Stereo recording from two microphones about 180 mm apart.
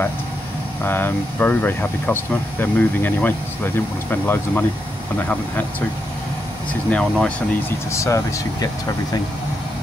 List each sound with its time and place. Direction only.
0.8 s speech: 10° left (ahead or behind)
6.9 s speech: 5° left (ahead or behind)
7.9 s speech: 15° left (ahead or behind)